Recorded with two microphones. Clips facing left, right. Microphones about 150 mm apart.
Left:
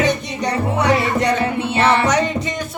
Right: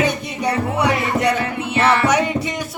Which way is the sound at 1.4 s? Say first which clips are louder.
Left 2 dB; 30° left (ahead or behind).